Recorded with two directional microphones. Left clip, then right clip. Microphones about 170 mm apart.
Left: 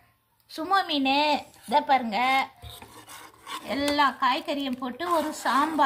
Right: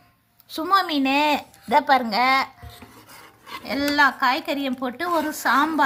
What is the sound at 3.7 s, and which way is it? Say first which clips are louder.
A woman's voice: right 5 dB; 35° right (ahead or behind).